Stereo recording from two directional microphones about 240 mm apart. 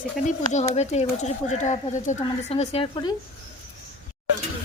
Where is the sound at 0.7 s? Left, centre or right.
Left.